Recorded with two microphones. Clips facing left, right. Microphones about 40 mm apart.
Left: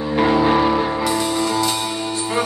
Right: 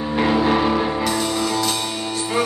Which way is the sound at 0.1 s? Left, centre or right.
Centre.